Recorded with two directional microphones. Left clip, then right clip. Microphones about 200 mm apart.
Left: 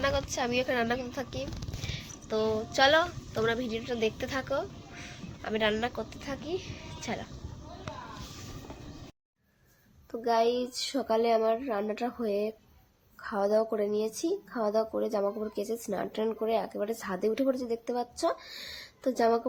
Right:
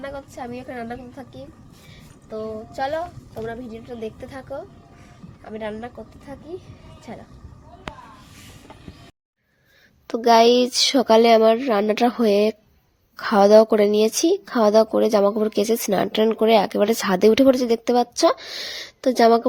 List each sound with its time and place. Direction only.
0.0 s a woman's voice: centre (ahead or behind)
10.1 s speech: 45° right (ahead or behind)